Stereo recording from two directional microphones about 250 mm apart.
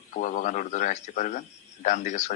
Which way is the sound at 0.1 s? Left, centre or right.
Left.